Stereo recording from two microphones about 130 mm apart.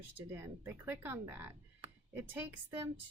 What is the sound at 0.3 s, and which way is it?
Speech, 15° right (ahead or behind).